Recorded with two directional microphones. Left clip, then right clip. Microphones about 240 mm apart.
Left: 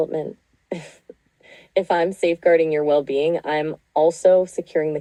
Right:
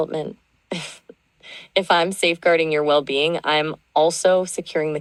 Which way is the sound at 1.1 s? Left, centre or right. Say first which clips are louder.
Left 2 dB; right.